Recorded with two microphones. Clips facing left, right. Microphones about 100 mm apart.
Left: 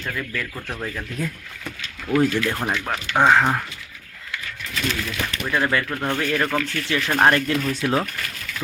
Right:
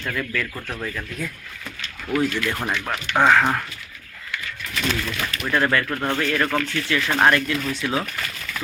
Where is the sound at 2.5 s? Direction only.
15° left (ahead or behind).